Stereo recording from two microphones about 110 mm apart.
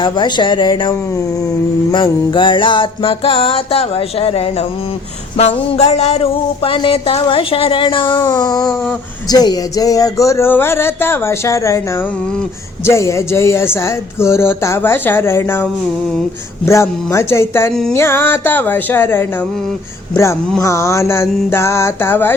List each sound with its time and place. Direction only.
0.0 s speech: 45° left (ahead or behind)
1.9 s music: 45° left (ahead or behind); by 4.4 s 65° left (ahead or behind)
5.4 s a sound: 75° left (ahead or behind)
6.7 s speech: 60° left (ahead or behind)
8.3 s a sound: 35° left (ahead or behind)
9.3 s speech: 35° left (ahead or behind)
12.8 s speech: 25° left (ahead or behind)
16.6 s speech: 25° left (ahead or behind)
20.6 s speech: 25° left (ahead or behind)